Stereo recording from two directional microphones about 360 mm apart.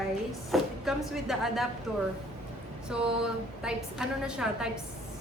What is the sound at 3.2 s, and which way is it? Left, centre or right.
A woman's voice, centre.